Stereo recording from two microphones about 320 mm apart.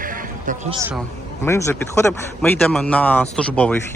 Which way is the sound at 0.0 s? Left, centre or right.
Right.